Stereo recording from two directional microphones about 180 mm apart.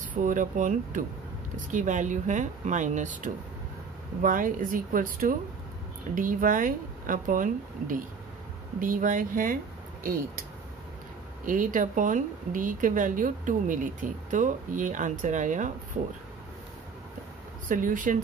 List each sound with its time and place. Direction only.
0.1 s speech: 45° right (ahead or behind)
11.4 s speech: 45° right (ahead or behind)
17.6 s speech: 45° right (ahead or behind)